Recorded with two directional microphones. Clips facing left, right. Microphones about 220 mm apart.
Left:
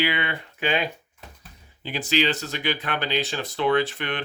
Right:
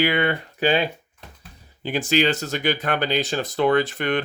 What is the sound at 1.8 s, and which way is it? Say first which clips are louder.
Speech: right 4 dB; 50° right (ahead or behind).